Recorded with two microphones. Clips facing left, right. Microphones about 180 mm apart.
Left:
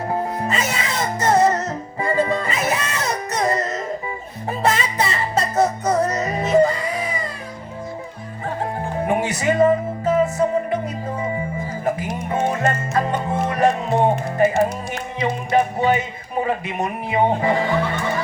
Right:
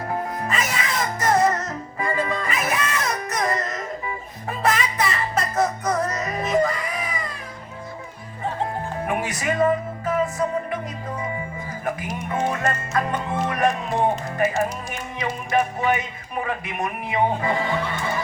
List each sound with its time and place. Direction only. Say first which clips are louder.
0.1 s music: left 3 dB; 30° left (ahead or behind)
9.0 s music: left 6 dB; 25° left (ahead or behind)
11.9 s music: left 4 dB; 25° left (ahead or behind)
14.5 s music: left 5 dB; 90° left
15.2 s music: left 4 dB; 30° left (ahead or behind)